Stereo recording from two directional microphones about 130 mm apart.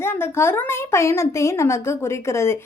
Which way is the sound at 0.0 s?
20° left (ahead or behind).